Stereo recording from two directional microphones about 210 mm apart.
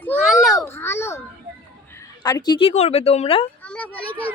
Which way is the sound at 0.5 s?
10° left (ahead or behind).